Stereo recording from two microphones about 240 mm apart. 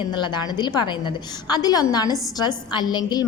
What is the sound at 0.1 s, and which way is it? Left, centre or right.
A woman's voice, centre.